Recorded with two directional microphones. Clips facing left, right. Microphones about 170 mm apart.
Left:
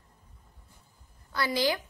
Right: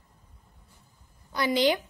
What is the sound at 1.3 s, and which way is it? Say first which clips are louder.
Speech: right 4 dB; 20° right (ahead or behind).